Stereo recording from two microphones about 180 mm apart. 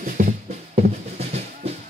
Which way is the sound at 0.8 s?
35° right (ahead or behind).